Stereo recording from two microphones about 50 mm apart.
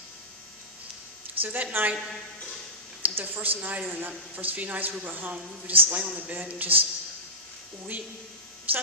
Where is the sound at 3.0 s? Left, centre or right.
Right.